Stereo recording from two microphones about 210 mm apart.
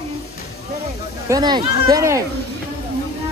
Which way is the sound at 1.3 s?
20° right (ahead or behind).